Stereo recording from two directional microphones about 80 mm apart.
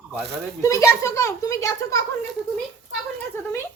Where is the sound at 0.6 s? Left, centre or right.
Left.